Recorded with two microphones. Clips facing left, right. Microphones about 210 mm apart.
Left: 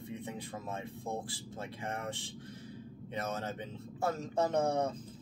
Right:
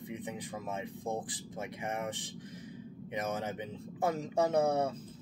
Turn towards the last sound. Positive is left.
turn(degrees=-10)  # may be behind; listen again after turning